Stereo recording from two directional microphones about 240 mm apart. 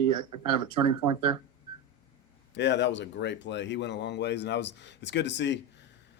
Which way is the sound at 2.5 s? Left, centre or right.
Left.